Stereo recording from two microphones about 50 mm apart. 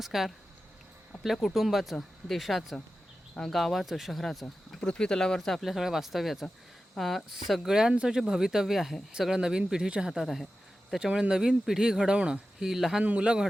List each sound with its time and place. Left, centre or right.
0.0 s speech: centre
4.8 s speech: centre
5.4 s speech: centre
10.2 s speech: centre
11.0 s speech: centre
13.0 s a man's voice: right